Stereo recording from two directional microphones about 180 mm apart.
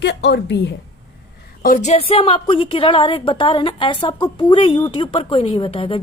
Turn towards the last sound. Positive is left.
turn(degrees=30)  # may be behind; listen again after turning